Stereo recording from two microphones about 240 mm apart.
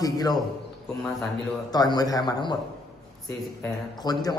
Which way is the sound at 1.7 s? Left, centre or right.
Centre.